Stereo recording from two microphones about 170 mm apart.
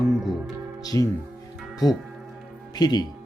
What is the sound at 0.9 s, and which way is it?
Speech, 20° left (ahead or behind).